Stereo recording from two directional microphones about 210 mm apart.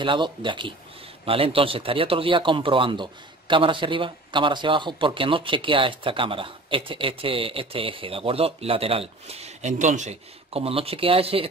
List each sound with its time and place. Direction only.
0.0 s a man's voice: 25° right (ahead or behind)